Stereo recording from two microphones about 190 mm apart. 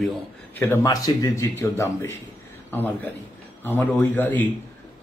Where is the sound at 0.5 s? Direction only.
15° left (ahead or behind).